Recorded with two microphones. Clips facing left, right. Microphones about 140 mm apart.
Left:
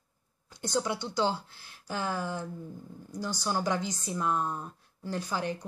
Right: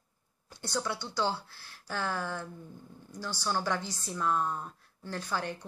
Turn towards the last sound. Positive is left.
turn(degrees=15)  # may be behind; listen again after turning